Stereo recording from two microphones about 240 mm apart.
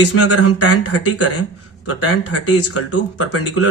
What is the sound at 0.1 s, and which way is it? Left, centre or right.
Speech, left.